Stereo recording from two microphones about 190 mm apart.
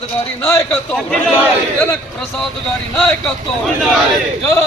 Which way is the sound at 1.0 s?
Centre (ahead or behind).